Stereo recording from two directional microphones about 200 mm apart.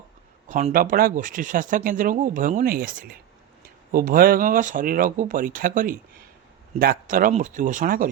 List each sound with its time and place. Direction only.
0.4 s speech: 40° right (ahead or behind)